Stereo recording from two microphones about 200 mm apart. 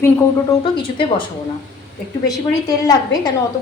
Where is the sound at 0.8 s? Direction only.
25° left (ahead or behind).